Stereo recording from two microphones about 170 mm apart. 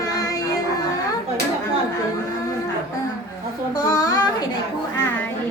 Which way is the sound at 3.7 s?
25° left (ahead or behind).